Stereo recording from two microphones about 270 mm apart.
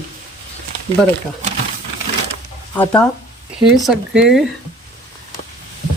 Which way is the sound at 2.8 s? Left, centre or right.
Centre.